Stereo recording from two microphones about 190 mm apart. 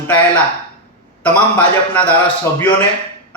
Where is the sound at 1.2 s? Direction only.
10° left (ahead or behind).